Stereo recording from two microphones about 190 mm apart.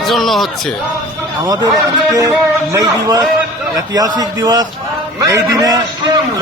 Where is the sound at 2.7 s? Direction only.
15° right (ahead or behind).